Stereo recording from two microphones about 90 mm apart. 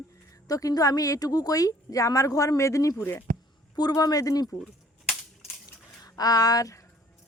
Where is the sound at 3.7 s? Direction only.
45° left (ahead or behind).